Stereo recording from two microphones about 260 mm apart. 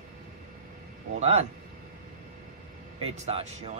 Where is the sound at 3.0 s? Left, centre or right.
Right.